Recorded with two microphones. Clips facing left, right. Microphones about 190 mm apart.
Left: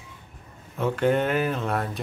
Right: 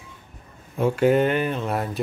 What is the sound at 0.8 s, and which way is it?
Speech, 10° right (ahead or behind).